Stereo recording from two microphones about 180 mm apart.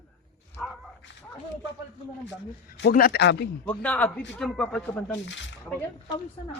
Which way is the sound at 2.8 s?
55° left (ahead or behind).